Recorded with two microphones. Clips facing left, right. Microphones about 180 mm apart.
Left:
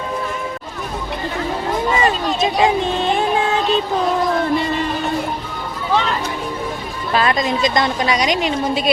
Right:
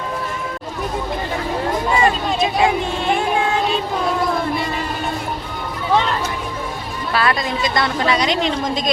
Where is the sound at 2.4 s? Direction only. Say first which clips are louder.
Left 1 dB; 25° left (ahead or behind).